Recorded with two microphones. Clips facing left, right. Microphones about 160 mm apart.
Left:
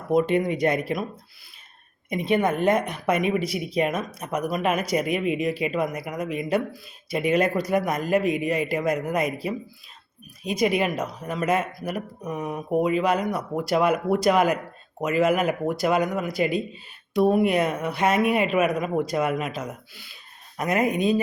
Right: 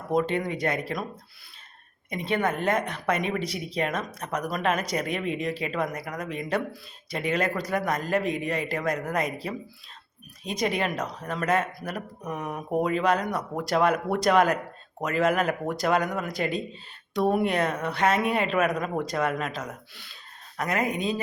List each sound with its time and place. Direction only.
0.1 s a woman's voice: 10° left (ahead or behind)
2.0 s a woman's voice: 15° left (ahead or behind)